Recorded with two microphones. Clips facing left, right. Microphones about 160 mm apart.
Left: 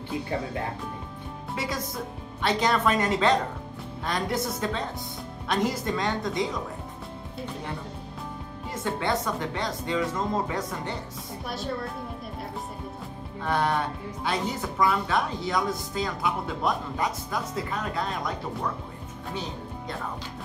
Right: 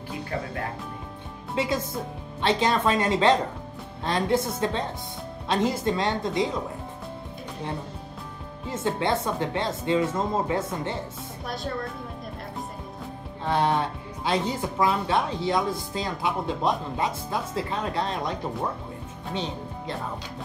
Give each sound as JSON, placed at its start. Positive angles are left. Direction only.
{"t": 1.5, "sound": "a woman's voice", "side_deg": -25}
{"t": 8.6, "sound": "a woman's voice", "side_deg": -25}
{"t": 13.4, "sound": "a woman's voice", "side_deg": -25}